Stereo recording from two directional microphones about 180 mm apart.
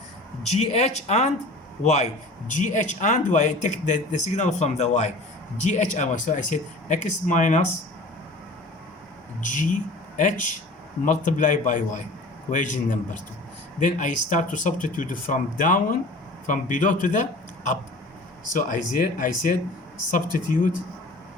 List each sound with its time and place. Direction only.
0.4 s speech: 35° left (ahead or behind)
9.4 s speech: 45° left (ahead or behind)